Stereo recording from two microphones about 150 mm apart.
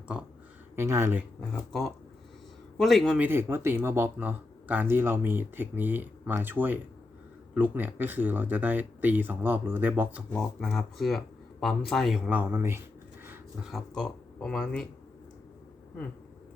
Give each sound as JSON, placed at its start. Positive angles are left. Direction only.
{"t": 0.8, "sound": "speech", "side_deg": -15}
{"t": 2.7, "sound": "speech", "side_deg": 0}
{"t": 3.2, "sound": "speech", "side_deg": -15}
{"t": 10.2, "sound": "speech", "side_deg": 10}
{"t": 13.2, "sound": "a sound", "side_deg": -15}
{"t": 13.7, "sound": "speech", "side_deg": 0}